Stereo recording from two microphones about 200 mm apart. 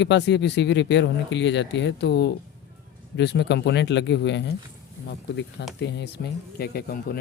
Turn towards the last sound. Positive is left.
turn(degrees=50)  # may be behind; listen again after turning